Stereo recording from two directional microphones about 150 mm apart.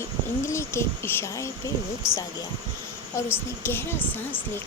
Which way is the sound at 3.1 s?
20° left (ahead or behind).